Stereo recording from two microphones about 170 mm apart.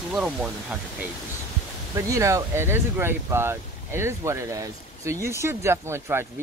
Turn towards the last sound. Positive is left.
turn(degrees=-15)  # may be behind; listen again after turning